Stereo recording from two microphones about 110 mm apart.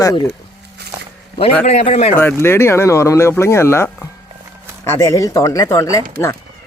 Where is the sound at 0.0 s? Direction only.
30° left (ahead or behind).